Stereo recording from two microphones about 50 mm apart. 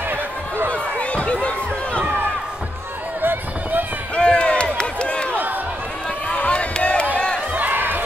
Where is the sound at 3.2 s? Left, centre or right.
Right.